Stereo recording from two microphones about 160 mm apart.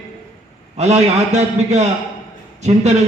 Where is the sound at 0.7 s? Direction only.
45° right (ahead or behind).